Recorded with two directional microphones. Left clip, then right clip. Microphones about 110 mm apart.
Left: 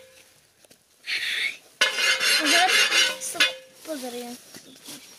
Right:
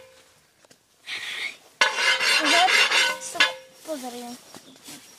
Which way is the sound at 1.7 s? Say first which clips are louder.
Right 2 dB; 45° left (ahead or behind).